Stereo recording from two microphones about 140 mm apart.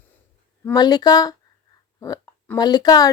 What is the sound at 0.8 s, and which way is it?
Speech, 30° left (ahead or behind).